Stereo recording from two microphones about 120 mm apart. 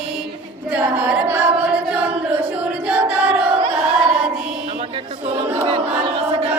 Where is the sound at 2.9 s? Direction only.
10° right (ahead or behind).